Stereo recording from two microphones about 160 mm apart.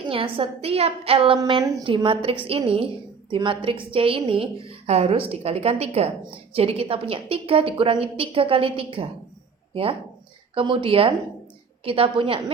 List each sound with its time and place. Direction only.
0.1 s a woman's voice: 35° right (ahead or behind)
10.5 s a woman's voice: 35° right (ahead or behind)